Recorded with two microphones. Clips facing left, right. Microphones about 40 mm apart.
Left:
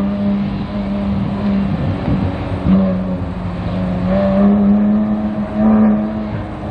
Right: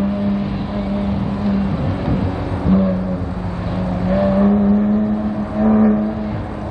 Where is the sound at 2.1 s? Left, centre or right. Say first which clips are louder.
Left 1 dB; left.